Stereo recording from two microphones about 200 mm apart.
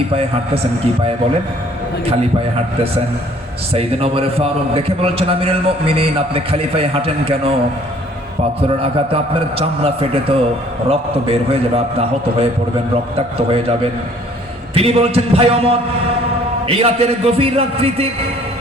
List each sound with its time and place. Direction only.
0.1 s a man's voice: 30° right (ahead or behind)
3.7 s a man's voice: 30° right (ahead or behind)
8.6 s a man's voice: 30° right (ahead or behind)
14.8 s a man's voice: 30° right (ahead or behind)